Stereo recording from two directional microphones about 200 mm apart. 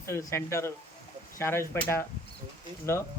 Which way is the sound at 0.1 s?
15° left (ahead or behind).